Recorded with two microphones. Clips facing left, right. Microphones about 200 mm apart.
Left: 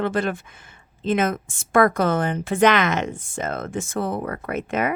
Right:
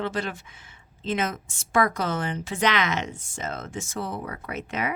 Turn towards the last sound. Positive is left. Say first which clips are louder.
# left 6 dB
turn(degrees=50)  # may be behind; listen again after turning